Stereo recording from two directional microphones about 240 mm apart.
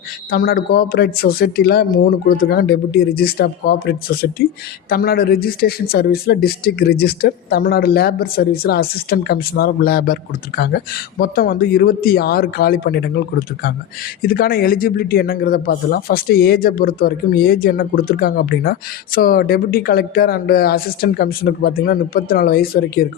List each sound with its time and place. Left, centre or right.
0.3 s speech: left